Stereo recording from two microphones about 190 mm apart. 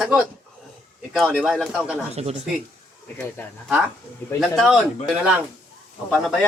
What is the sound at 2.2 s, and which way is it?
Speech, 35° right (ahead or behind).